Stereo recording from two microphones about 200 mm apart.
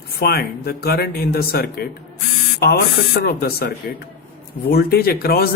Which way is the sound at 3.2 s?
50° left (ahead or behind).